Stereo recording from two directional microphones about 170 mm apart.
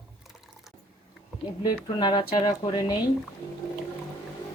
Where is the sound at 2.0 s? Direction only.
25° left (ahead or behind).